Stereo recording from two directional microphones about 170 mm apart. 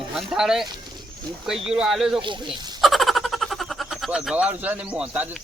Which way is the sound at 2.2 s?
30° right (ahead or behind).